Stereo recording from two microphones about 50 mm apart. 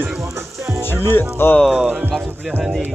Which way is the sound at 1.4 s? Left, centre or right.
Left.